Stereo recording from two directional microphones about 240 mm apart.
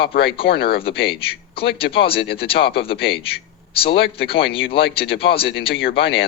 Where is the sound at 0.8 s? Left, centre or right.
Left.